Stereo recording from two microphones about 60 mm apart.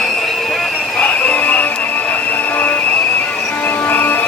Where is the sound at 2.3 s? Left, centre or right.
Left.